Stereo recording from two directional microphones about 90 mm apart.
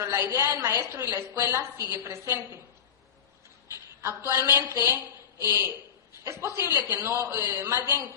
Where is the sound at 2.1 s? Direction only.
30° right (ahead or behind).